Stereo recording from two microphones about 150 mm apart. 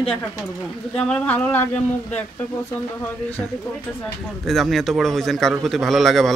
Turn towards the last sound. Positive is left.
turn(degrees=0)  # may be behind; listen again after turning